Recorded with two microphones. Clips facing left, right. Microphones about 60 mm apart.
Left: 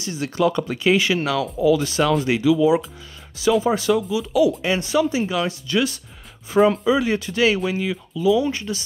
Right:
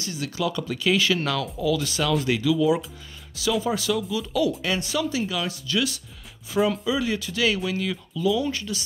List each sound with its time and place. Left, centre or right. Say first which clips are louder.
0.0 s speech: left 7 dB; left
1.2 s speech: left 4 dB; centre
1.6 s speech: left 8 dB; left
4.1 s speech: left 6 dB; centre
4.6 s speech: left 6 dB; left